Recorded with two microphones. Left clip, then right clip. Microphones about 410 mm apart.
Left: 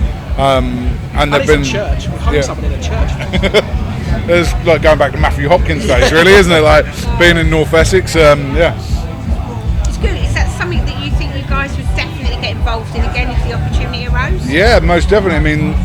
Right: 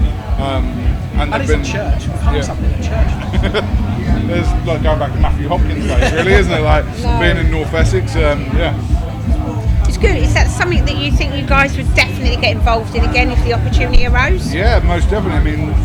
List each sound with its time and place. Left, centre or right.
0.3 s a man's voice: left
3.3 s speech: left
10.0 s speech: right
14.5 s speech: left